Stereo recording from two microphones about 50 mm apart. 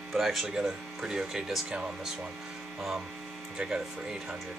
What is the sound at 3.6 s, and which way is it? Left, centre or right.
Speech, right.